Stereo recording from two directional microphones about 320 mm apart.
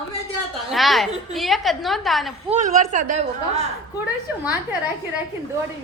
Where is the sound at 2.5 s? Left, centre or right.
Right.